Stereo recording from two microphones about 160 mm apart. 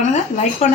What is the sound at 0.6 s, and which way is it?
Speech, 45° left (ahead or behind).